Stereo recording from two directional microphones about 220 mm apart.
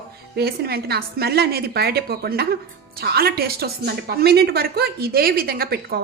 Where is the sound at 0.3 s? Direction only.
45° right (ahead or behind).